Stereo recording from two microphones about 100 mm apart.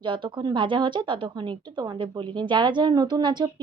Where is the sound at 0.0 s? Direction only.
55° right (ahead or behind).